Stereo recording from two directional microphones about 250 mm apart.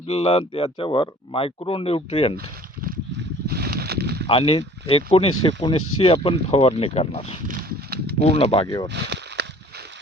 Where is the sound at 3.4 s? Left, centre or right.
Right.